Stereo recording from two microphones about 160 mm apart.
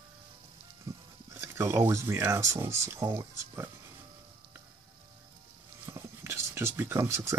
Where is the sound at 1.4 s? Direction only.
15° right (ahead or behind).